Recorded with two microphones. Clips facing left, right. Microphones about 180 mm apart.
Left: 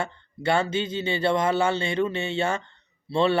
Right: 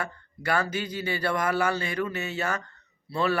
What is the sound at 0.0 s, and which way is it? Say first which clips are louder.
Speech: left 5 dB; 25° left (ahead or behind).